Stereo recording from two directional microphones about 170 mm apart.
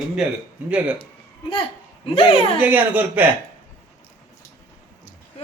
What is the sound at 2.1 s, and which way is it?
Speech, 35° left (ahead or behind).